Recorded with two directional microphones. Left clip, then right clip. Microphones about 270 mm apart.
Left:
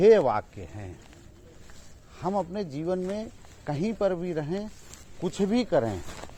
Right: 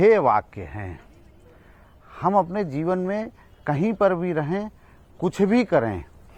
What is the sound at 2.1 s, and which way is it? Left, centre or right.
Speech, right.